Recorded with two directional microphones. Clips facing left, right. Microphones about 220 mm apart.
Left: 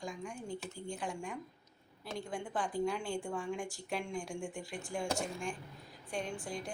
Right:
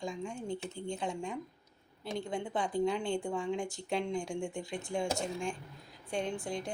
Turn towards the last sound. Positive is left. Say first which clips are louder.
# right 4 dB
turn(degrees=-25)  # may be behind; listen again after turning